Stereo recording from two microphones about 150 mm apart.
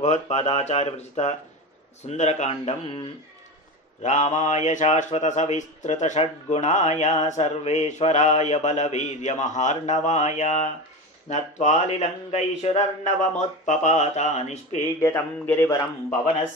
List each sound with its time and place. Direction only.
0.0 s a man's voice: 50° left (ahead or behind)
4.0 s a man's voice: 55° left (ahead or behind)
11.6 s a man's voice: 50° left (ahead or behind)
15.0 s speech: 15° left (ahead or behind)